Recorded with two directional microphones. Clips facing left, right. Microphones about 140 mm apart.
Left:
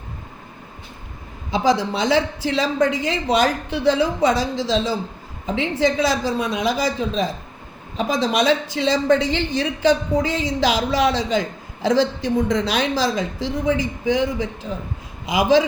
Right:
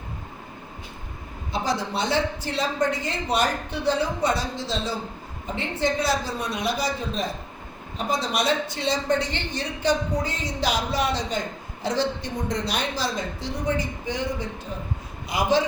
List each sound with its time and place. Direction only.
1.5 s a woman's voice: 90° left